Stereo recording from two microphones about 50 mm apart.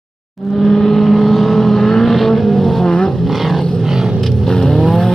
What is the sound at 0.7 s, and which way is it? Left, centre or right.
Vehicle, centre.